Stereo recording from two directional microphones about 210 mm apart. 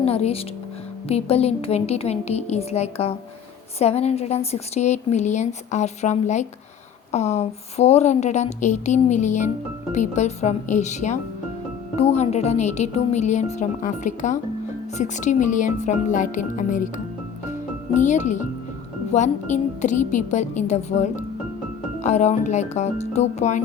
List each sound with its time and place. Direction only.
0.0 s a woman's voice: 30° left (ahead or behind)
17.9 s a woman's voice: 35° left (ahead or behind)